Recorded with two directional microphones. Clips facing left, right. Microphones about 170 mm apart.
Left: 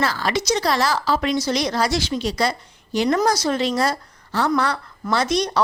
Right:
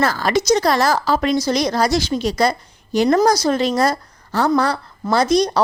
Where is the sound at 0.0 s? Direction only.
45° right (ahead or behind).